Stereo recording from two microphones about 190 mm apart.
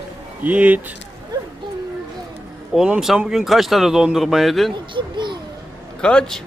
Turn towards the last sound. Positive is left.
turn(degrees=5)  # may be behind; listen again after turning